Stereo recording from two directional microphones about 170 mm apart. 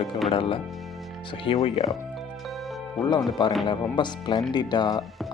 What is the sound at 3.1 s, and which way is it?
Speech, 25° left (ahead or behind).